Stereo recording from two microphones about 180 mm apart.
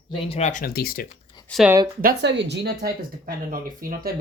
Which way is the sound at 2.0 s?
70° right (ahead or behind).